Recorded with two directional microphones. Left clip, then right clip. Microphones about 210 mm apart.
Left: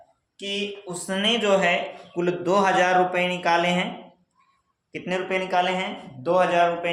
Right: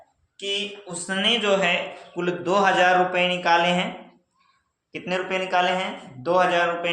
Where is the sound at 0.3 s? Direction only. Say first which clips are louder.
Right 2 dB; 30° left (ahead or behind); by 3.8 s 15° left (ahead or behind).